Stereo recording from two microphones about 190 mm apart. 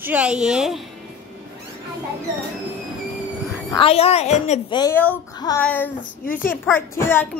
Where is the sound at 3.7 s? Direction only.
30° left (ahead or behind).